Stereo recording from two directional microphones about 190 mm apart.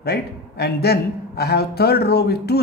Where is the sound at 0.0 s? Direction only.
55° left (ahead or behind).